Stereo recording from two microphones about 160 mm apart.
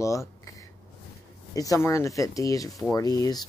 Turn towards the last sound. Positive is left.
turn(degrees=25)  # may be behind; listen again after turning